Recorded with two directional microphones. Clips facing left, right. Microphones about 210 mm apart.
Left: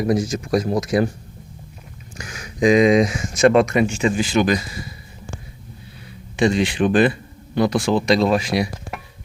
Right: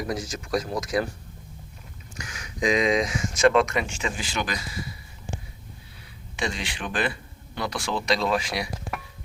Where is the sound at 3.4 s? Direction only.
45° left (ahead or behind).